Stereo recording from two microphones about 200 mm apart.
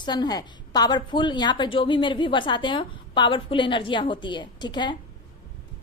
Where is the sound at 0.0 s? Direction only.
20° left (ahead or behind).